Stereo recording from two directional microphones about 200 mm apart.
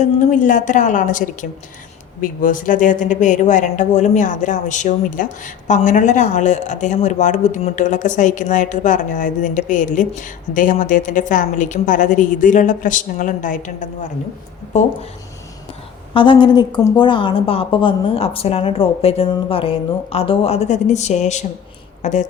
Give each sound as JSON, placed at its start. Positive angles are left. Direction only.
{"t": 0.0, "sound": "speech", "side_deg": 40}
{"t": 16.1, "sound": "a woman's voice", "side_deg": 25}